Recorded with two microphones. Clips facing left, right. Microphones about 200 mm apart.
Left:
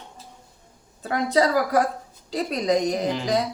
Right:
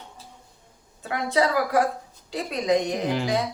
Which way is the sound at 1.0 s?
40° left (ahead or behind).